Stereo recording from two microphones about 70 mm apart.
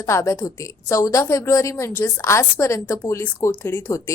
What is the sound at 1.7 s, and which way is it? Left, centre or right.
A woman's voice, left.